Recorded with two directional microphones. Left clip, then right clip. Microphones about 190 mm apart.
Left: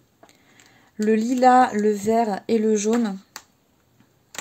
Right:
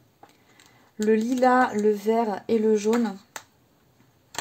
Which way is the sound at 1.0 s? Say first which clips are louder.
Left 3 dB; 30° left (ahead or behind).